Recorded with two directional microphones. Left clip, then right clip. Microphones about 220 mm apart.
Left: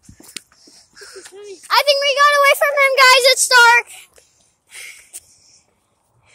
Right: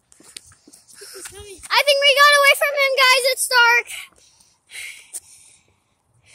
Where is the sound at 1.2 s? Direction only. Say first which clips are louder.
Left 4 dB; 55° right (ahead or behind).